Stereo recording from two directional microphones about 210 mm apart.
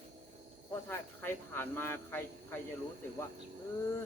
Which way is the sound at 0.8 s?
10° left (ahead or behind).